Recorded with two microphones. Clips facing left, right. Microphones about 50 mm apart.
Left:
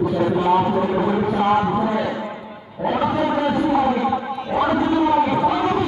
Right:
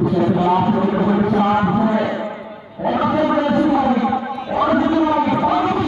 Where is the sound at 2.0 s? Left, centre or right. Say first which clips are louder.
Right 3 dB; centre.